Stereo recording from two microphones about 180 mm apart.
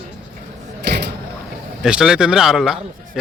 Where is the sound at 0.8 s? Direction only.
65° right (ahead or behind).